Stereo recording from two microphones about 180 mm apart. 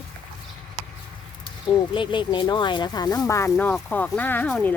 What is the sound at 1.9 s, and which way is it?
Speech, 25° left (ahead or behind).